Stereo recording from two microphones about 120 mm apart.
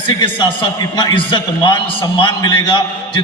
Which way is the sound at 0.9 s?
40° left (ahead or behind).